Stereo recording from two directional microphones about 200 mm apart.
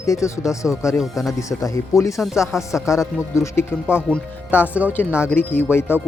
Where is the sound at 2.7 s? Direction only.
15° left (ahead or behind).